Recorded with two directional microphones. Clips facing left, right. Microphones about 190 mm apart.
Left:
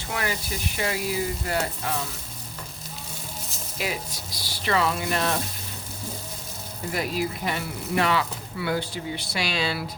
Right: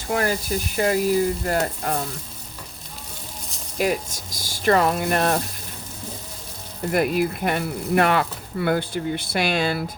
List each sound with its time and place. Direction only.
0.1 s speech: 40° right (ahead or behind)
3.8 s speech: 45° right (ahead or behind)
6.9 s speech: 55° right (ahead or behind)